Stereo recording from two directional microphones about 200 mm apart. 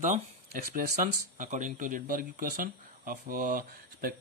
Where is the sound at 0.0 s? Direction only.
45° right (ahead or behind).